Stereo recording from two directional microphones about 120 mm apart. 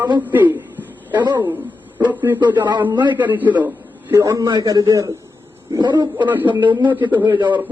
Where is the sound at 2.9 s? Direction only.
40° right (ahead or behind).